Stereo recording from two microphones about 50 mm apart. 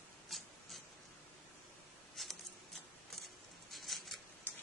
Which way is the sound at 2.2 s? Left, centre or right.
Centre.